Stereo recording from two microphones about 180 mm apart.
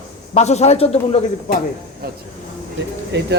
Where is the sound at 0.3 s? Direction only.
40° left (ahead or behind).